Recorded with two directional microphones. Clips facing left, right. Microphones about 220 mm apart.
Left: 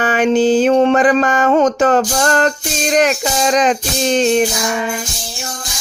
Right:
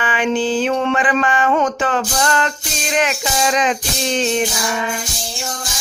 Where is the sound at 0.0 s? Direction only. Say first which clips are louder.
Left 6 dB; 45° left (ahead or behind).